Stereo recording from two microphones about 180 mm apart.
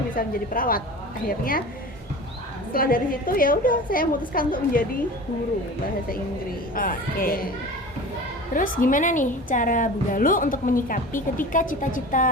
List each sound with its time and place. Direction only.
0.2 s a woman's voice: 50° left (ahead or behind)
2.7 s a woman's voice: 55° left (ahead or behind)
6.7 s a woman's voice: 50° left (ahead or behind)
8.5 s a woman's voice: 50° left (ahead or behind)